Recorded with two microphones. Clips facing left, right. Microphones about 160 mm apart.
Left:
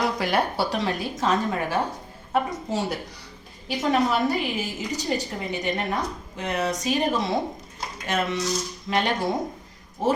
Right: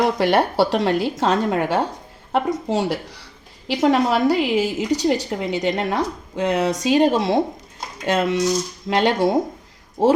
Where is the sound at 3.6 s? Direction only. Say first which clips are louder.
Right 5 dB; 90° right; by 7.4 s 75° right (ahead or behind).